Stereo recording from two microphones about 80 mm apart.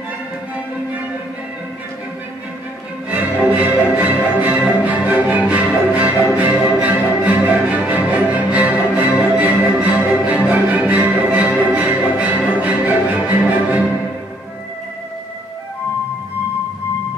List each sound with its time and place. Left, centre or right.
3.1 s music: right